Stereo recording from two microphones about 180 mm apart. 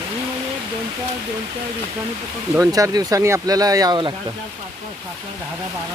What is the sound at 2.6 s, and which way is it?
Speech, 20° right (ahead or behind).